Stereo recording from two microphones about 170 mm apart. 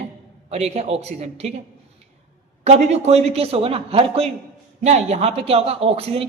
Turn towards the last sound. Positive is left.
turn(degrees=-35)  # may be behind; listen again after turning